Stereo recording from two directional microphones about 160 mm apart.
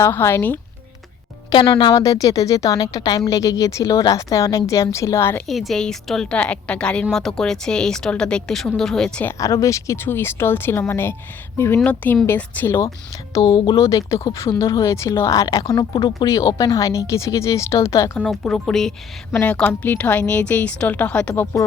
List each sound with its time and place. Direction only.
0.0 s a woman's voice: 15° left (ahead or behind)
1.5 s speech: 30° left (ahead or behind)
1.9 s speech: 20° left (ahead or behind)
5.5 s a woman's voice: centre (ahead or behind)
9.4 s a woman's voice: 20° left (ahead or behind)
18.2 s a woman's voice: 5° left (ahead or behind)